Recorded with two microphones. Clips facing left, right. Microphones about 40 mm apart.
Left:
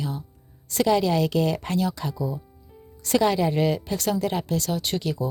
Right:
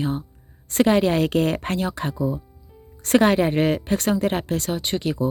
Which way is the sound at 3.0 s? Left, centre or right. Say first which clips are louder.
Right 4 dB; right.